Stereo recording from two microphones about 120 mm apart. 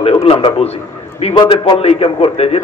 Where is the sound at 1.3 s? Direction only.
40° left (ahead or behind).